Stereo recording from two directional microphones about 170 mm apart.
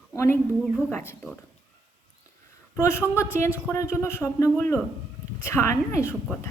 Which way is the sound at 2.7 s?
15° left (ahead or behind).